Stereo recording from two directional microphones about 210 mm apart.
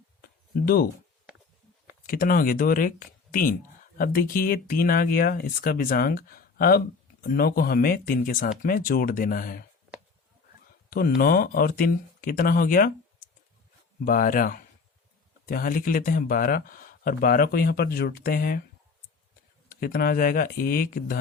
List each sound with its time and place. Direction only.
0.2 s a sound: 45° left (ahead or behind)
2.0 s speech: 40° left (ahead or behind)
3.9 s speech: 45° left (ahead or behind)
10.8 s speech: 45° left (ahead or behind)
14.0 s speech: 40° left (ahead or behind)
19.6 s speech: 45° left (ahead or behind)